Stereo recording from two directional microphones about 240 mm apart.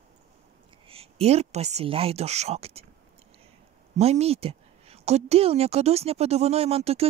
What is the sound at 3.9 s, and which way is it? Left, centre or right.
Speech, right.